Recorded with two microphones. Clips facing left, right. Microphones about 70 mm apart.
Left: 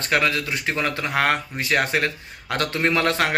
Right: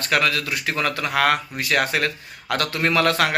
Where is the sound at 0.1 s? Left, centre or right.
Left.